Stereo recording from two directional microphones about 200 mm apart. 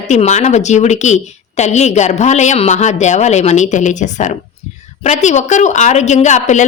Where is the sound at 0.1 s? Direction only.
35° left (ahead or behind).